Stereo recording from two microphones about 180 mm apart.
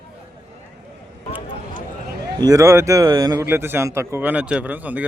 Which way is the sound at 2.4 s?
20° right (ahead or behind).